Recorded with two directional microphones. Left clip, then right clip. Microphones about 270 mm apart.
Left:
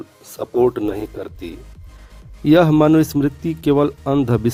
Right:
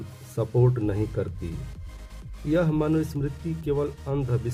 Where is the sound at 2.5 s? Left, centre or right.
Left.